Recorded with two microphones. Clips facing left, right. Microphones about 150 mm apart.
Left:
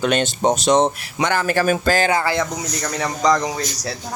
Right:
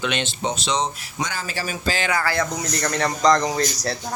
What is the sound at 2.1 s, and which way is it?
Speech, 20° left (ahead or behind).